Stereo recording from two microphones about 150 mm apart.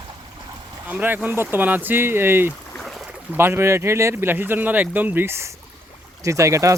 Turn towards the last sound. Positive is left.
turn(degrees=-20)  # may be behind; listen again after turning